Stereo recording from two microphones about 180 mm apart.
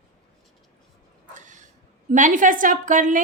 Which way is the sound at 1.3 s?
45° right (ahead or behind).